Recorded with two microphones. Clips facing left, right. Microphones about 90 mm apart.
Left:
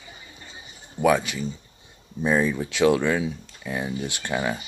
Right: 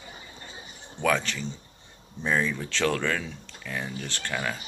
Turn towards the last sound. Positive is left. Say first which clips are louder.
# left 5 dB
turn(degrees=20)  # may be behind; listen again after turning